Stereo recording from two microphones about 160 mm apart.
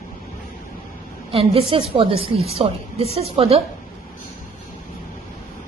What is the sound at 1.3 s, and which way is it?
A woman's voice, 35° right (ahead or behind).